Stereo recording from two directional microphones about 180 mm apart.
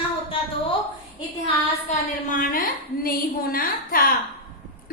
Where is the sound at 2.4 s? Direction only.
50° left (ahead or behind).